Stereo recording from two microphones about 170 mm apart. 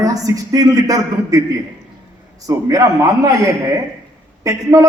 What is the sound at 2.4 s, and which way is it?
A man's voice, 20° right (ahead or behind).